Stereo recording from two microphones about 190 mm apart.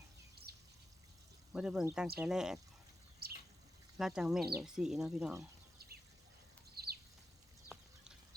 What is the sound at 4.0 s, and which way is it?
Speech, 5° right (ahead or behind).